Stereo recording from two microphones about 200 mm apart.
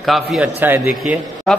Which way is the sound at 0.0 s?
Centre (ahead or behind).